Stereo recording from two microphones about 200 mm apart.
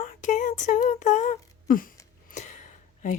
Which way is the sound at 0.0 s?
40° left (ahead or behind).